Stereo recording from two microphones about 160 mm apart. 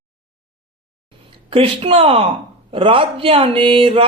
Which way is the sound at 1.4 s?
35° right (ahead or behind).